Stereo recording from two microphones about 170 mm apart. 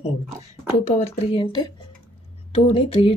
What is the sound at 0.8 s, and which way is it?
Speech, 40° left (ahead or behind).